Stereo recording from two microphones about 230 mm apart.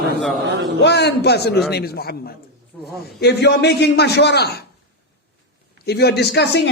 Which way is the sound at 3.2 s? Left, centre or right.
Left.